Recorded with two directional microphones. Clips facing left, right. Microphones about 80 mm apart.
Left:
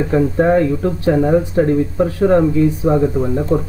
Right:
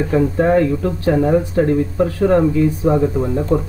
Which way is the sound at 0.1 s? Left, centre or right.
Centre.